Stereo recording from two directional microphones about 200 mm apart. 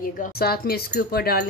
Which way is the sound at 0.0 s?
45° left (ahead or behind).